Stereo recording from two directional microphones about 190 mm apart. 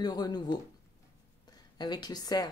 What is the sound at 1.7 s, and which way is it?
Speech, 20° left (ahead or behind).